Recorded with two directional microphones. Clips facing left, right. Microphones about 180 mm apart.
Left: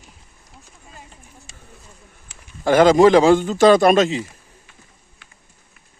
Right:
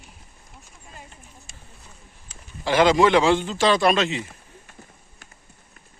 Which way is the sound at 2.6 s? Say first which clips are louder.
Left 6 dB; 45° left (ahead or behind).